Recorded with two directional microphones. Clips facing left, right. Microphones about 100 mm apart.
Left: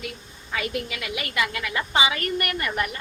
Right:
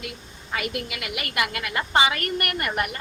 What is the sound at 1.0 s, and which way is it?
A woman's voice, 55° right (ahead or behind).